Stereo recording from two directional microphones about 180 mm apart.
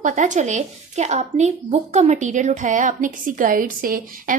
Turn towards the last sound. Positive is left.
turn(degrees=-50)  # may be behind; listen again after turning